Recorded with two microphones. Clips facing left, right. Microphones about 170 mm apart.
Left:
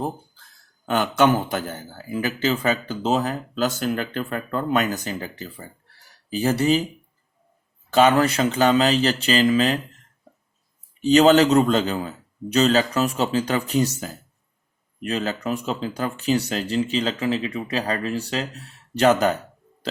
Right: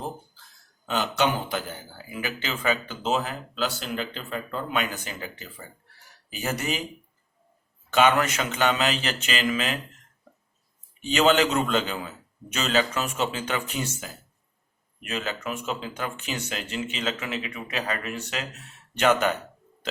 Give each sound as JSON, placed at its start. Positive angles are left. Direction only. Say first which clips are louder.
{"t": 0.9, "sound": "a man's voice", "louder": "left 6 dB", "side_deg": 50}
{"t": 2.0, "sound": "speech", "louder": "left 9 dB", "side_deg": 35}
{"t": 7.9, "sound": "speech", "louder": "left 4 dB", "side_deg": 35}
{"t": 11.0, "sound": "speech", "louder": "left 7 dB", "side_deg": 35}